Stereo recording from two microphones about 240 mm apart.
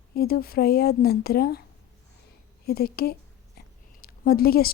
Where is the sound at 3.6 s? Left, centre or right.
Left.